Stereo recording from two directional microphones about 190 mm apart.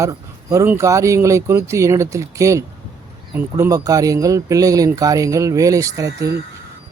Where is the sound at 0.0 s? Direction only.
15° right (ahead or behind).